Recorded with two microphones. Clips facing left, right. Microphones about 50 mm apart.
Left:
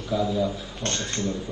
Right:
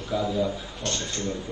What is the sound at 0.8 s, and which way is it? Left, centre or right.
Speech, left.